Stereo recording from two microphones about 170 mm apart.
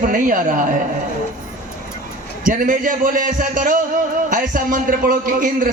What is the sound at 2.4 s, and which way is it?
A man's voice, 55° right (ahead or behind).